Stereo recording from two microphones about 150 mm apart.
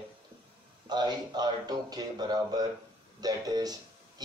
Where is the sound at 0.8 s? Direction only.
30° right (ahead or behind).